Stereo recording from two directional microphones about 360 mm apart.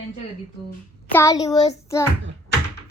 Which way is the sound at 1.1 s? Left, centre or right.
Centre.